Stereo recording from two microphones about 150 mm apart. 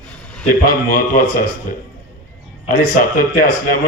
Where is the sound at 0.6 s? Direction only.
70° left (ahead or behind).